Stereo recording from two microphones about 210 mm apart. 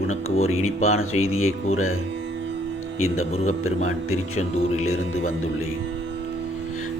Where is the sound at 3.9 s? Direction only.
90° left.